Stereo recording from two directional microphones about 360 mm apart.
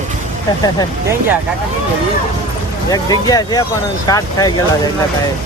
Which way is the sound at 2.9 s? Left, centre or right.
Centre.